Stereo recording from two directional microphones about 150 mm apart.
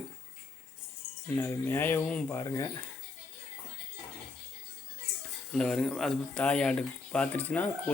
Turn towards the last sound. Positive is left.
turn(degrees=10)  # may be behind; listen again after turning